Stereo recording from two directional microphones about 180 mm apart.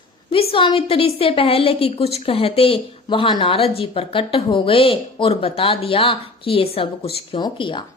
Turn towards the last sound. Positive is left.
turn(degrees=25)  # may be behind; listen again after turning